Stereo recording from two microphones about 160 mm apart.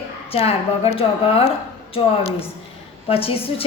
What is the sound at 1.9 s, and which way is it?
A woman's voice, 35° left (ahead or behind).